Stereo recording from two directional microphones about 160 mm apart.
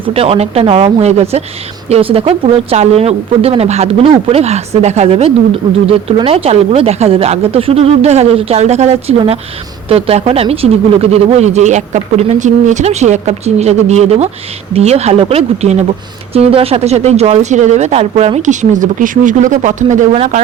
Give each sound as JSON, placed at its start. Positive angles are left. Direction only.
{"t": 0.0, "sound": "a woman's voice", "side_deg": -35}